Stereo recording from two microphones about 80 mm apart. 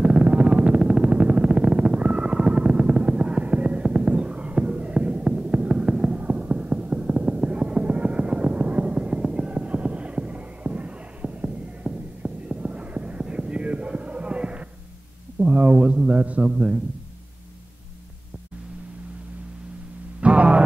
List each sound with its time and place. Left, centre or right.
0.0 s music: centre
3.9 s a sound: centre
15.3 s a man's voice: centre
20.2 s music: centre